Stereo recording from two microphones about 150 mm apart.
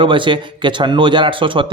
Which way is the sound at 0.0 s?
35° right (ahead or behind).